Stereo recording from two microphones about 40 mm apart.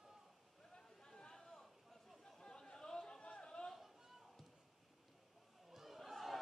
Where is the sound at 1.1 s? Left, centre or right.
Centre.